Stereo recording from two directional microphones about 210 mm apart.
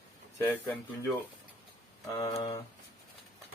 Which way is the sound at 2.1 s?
20° left (ahead or behind).